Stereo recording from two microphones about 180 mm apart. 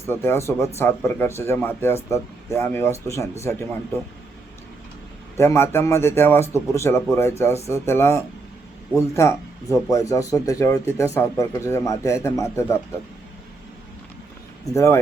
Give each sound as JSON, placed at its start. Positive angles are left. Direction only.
{"t": 0.1, "sound": "speech", "side_deg": 15}
{"t": 5.4, "sound": "speech", "side_deg": 15}
{"t": 14.6, "sound": "speech", "side_deg": 15}